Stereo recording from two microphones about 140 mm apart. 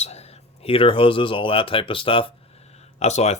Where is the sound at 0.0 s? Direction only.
50° left (ahead or behind).